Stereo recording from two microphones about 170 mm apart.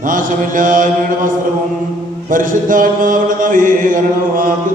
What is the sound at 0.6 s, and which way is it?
Mantra, 50° right (ahead or behind).